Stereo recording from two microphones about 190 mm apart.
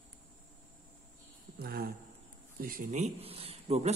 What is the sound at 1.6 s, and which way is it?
Speech, 50° right (ahead or behind).